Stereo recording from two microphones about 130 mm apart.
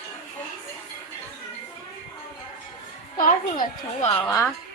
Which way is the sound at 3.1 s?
90° left.